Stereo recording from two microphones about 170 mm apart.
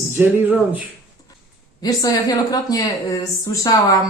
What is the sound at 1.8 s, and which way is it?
Speech, 20° left (ahead or behind).